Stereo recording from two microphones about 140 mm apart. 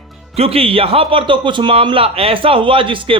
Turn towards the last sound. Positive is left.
turn(degrees=-40)  # may be behind; listen again after turning